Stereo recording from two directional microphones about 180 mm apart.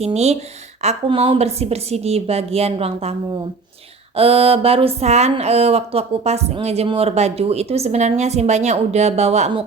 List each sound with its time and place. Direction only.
0.0 s speech: 35° right (ahead or behind)